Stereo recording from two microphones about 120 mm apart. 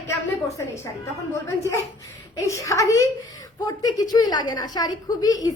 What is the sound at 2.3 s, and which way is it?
A woman's voice, 25° left (ahead or behind).